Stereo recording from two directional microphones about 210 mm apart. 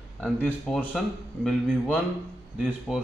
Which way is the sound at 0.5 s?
Centre (ahead or behind).